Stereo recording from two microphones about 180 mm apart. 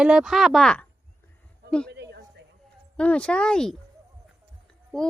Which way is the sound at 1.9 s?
70° right (ahead or behind).